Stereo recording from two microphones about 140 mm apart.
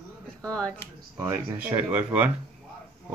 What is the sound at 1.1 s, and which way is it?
Speech, 20° right (ahead or behind).